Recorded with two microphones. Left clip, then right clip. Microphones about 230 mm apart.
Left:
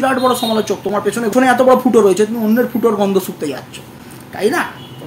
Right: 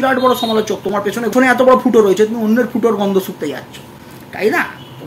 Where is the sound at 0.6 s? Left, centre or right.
Centre.